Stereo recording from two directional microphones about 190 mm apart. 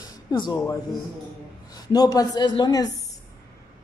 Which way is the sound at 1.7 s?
20° left (ahead or behind).